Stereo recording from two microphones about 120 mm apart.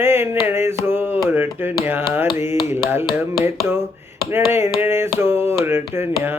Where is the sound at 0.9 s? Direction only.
15° right (ahead or behind).